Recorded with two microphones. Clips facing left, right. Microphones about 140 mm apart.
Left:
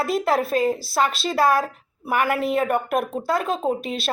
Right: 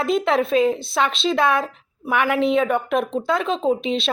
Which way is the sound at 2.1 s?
40° left (ahead or behind).